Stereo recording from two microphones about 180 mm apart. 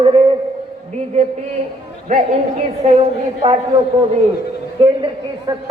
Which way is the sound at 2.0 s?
40° right (ahead or behind).